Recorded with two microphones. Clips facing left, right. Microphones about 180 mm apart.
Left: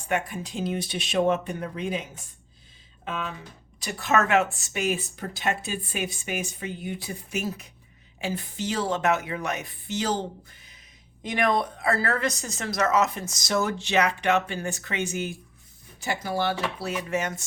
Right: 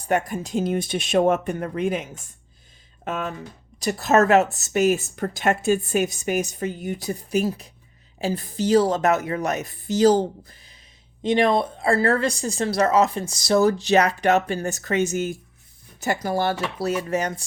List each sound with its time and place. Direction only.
0.1 s speech: 40° right (ahead or behind)